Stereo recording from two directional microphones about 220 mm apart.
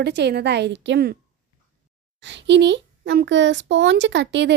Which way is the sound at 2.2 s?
55° right (ahead or behind).